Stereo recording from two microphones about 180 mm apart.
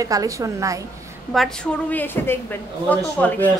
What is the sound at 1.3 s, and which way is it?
A woman's voice, 5° left (ahead or behind).